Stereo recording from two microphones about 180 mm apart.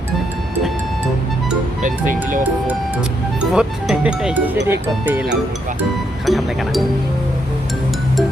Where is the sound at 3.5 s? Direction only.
5° right (ahead or behind).